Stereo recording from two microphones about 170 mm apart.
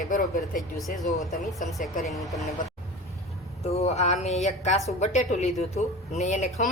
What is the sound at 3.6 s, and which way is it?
A woman's voice, 35° left (ahead or behind).